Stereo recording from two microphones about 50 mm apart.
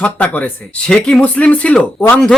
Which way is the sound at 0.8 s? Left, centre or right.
Centre.